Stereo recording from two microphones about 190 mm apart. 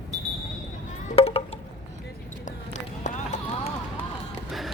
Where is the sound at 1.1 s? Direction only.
30° left (ahead or behind).